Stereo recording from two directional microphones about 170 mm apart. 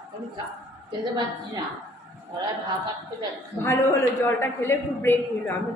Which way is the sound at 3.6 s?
15° left (ahead or behind).